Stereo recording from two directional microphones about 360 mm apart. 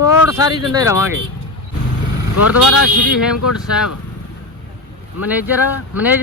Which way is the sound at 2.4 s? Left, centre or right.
Left.